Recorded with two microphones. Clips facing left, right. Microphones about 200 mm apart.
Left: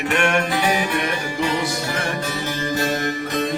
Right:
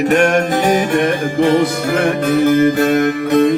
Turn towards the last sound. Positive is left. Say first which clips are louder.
# right 11 dB
turn(degrees=-60)  # may be behind; listen again after turning